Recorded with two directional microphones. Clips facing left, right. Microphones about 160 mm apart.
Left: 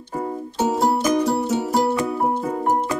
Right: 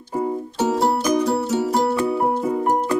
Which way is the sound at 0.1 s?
10° right (ahead or behind).